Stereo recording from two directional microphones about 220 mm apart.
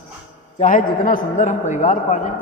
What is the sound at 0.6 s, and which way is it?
A man's voice, 35° left (ahead or behind).